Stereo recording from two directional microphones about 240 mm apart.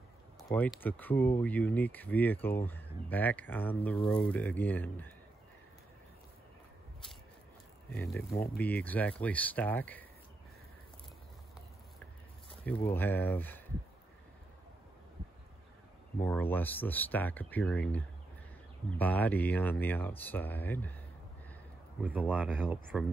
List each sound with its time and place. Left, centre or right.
0.4 s speech: centre
7.9 s speech: centre
8.3 s speech: left
8.6 s speech: centre
12.8 s speech: centre
16.2 s speech: centre
22.0 s speech: centre